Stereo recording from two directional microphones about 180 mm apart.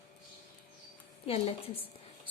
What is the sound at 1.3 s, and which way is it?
Speech, 35° left (ahead or behind).